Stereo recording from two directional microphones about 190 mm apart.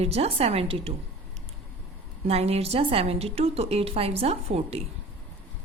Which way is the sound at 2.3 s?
30° right (ahead or behind).